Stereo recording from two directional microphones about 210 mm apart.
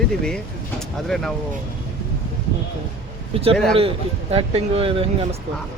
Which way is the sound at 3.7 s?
25° right (ahead or behind).